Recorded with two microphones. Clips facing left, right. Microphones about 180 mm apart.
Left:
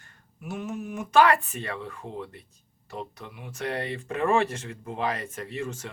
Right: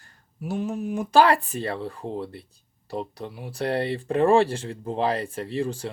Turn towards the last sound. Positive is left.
turn(degrees=-35)  # may be behind; listen again after turning